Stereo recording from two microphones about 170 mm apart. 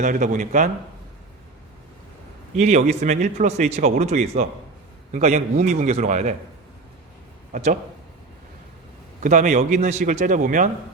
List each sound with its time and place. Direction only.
0.0 s a man's voice: 45° right (ahead or behind)
2.6 s a man's voice: 45° right (ahead or behind)
7.5 s a man's voice: 50° right (ahead or behind)
9.2 s a man's voice: 50° right (ahead or behind)